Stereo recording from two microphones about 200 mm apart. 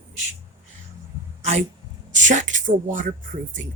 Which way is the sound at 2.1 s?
40° right (ahead or behind).